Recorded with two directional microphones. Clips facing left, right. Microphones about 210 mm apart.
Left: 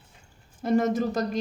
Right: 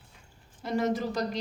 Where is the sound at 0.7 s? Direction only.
50° left (ahead or behind).